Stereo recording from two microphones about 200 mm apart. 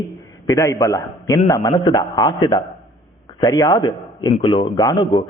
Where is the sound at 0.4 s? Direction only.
15° left (ahead or behind).